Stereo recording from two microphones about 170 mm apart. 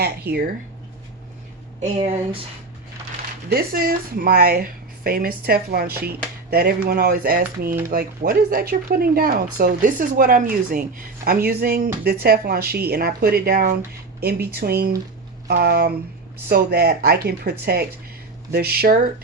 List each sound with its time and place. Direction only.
0.0 s speech: 70° right (ahead or behind)
1.8 s speech: 40° right (ahead or behind)
3.5 s speech: 65° right (ahead or behind)
11.4 s speech: 65° right (ahead or behind)